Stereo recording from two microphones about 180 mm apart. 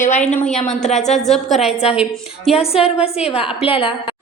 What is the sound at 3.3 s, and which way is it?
Speech, 30° left (ahead or behind).